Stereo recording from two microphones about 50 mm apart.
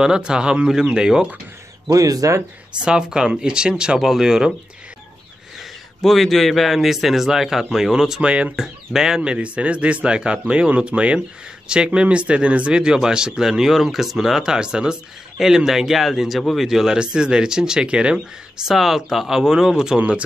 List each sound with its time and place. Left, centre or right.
0.0 s speech: centre
2.0 s speech: right
2.8 s speech: centre
4.0 s speech: centre
5.6 s a man's voice: centre
8.3 s speech: right
8.5 s speech: centre
9.3 s speech: right
18.7 s speech: centre
20.0 s speech: right